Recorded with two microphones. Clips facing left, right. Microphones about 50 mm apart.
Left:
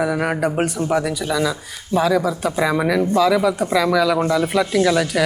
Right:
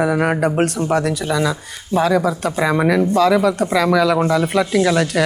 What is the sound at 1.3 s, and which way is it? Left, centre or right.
Speech, centre.